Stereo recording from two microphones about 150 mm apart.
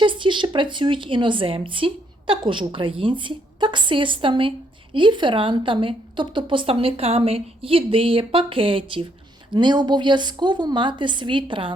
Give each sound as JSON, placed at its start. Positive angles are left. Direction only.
{"t": 0.0, "sound": "a woman's voice", "side_deg": -35}